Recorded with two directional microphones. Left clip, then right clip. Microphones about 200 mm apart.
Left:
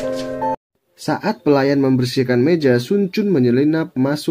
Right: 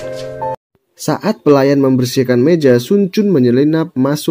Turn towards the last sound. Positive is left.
turn(degrees=-25)  # may be behind; listen again after turning